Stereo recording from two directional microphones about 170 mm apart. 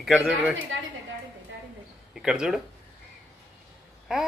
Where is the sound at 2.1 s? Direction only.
5° right (ahead or behind).